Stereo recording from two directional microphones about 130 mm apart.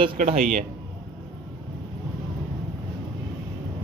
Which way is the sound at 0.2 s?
70° right (ahead or behind).